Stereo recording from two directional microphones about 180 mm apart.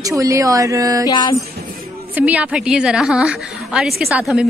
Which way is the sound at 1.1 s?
25° left (ahead or behind).